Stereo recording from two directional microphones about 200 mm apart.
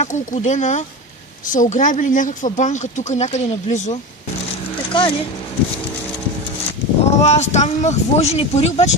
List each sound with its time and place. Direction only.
0.0 s speech: 35° left (ahead or behind)
4.9 s speech: 25° left (ahead or behind)
7.2 s speech: 35° left (ahead or behind)